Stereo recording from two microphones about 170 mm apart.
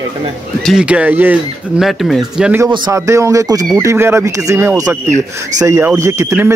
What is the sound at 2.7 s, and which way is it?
Speech, 25° right (ahead or behind).